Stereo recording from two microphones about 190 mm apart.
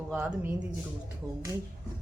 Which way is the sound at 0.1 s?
5° right (ahead or behind).